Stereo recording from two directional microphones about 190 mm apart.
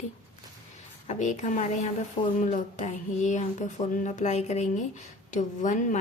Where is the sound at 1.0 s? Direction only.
40° left (ahead or behind).